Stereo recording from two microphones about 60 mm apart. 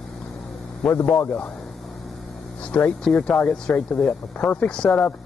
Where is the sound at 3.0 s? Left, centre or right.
Centre.